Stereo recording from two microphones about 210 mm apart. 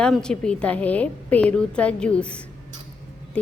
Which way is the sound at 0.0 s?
5° left (ahead or behind).